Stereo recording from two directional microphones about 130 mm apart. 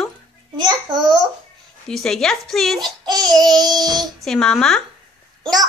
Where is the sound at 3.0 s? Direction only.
30° right (ahead or behind).